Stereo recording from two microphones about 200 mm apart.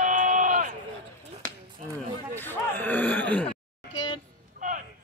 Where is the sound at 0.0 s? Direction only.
40° right (ahead or behind).